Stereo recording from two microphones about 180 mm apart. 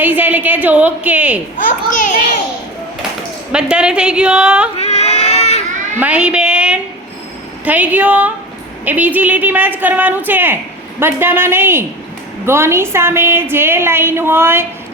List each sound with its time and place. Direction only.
0.0 s a woman's voice: 10° right (ahead or behind)
1.5 s a sound: 45° left (ahead or behind)
3.5 s a woman's voice: 5° right (ahead or behind)
4.8 s baby cry: 35° left (ahead or behind)
6.0 s a woman's voice: 5° right (ahead or behind)